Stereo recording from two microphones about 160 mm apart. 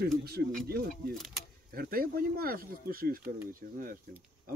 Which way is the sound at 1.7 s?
65° right (ahead or behind).